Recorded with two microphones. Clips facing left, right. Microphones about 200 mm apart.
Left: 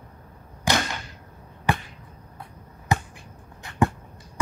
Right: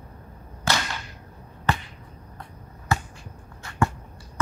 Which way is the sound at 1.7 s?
15° left (ahead or behind).